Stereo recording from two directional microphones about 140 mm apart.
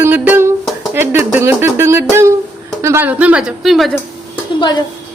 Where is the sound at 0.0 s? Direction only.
15° right (ahead or behind).